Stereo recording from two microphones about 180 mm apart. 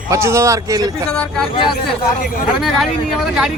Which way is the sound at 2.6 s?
Centre (ahead or behind).